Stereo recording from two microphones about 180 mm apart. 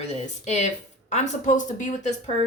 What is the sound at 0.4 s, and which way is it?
Speech, 40° left (ahead or behind).